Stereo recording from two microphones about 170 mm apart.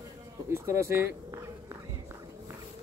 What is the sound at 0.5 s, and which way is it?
Speech, 15° right (ahead or behind).